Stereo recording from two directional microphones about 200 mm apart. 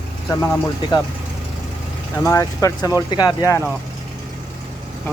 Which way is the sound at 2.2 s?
15° left (ahead or behind).